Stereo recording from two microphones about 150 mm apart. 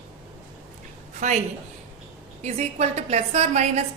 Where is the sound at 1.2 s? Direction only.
55° right (ahead or behind).